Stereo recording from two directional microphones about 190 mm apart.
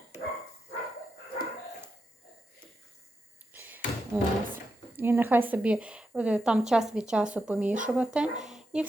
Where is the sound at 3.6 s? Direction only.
10° right (ahead or behind).